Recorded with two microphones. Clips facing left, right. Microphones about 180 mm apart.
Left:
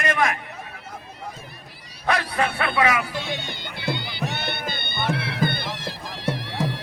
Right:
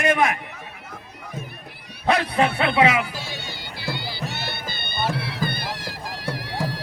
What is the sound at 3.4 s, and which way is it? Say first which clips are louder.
Music: left 3 dB; 20° left (ahead or behind).